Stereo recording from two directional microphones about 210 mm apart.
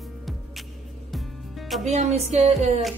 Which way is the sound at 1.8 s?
30° right (ahead or behind).